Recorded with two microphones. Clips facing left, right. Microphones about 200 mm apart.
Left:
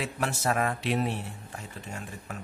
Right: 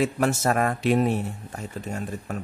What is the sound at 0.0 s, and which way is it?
Speech, 45° right (ahead or behind).